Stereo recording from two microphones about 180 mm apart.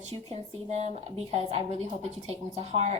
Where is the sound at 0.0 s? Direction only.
35° right (ahead or behind).